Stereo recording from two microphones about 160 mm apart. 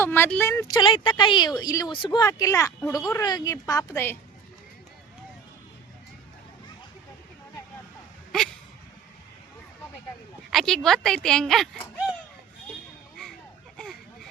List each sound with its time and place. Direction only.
0.0 s a woman's voice: 15° left (ahead or behind)
8.3 s speech: 5° left (ahead or behind)
10.5 s speech: centre (ahead or behind)
13.7 s vehicle: 5° left (ahead or behind)